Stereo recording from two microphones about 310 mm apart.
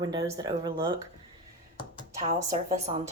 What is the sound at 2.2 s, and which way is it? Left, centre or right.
Speech, right.